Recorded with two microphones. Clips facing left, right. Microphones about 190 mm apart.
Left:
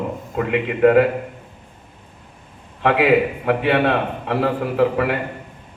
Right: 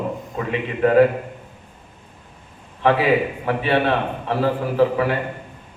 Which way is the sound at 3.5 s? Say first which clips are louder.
Left 1 dB; 65° left (ahead or behind).